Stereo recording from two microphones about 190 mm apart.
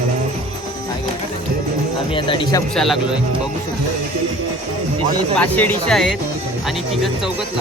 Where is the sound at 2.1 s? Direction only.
25° left (ahead or behind).